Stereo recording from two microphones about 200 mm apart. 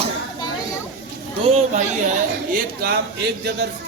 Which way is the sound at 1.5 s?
35° right (ahead or behind).